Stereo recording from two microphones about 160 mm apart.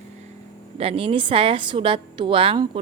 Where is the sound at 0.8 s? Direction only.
35° right (ahead or behind).